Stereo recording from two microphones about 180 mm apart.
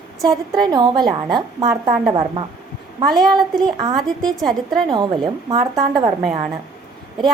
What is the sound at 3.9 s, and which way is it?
Speech, centre (ahead or behind).